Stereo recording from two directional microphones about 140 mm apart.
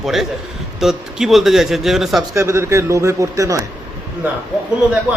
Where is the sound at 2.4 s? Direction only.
20° right (ahead or behind).